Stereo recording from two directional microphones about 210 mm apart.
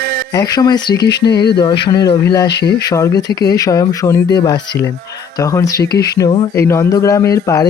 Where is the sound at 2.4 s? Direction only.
55° left (ahead or behind).